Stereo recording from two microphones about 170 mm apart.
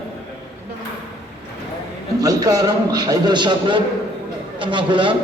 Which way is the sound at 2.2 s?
20° right (ahead or behind).